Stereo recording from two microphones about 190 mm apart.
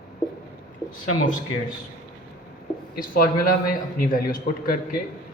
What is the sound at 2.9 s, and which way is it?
Speech, 50° left (ahead or behind).